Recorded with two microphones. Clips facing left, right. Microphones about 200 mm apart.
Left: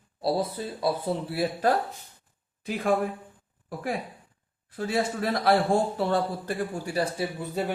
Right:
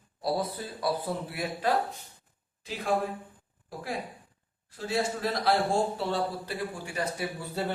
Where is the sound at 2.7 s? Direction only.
55° left (ahead or behind).